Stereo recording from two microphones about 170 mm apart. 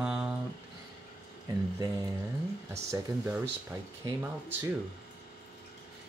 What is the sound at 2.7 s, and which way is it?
Speech, 15° right (ahead or behind).